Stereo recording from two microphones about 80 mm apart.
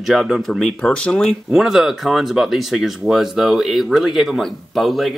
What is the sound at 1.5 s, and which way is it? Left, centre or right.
Speech, centre.